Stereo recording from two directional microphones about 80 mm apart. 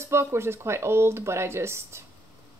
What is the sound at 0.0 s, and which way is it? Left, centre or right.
Speech, right.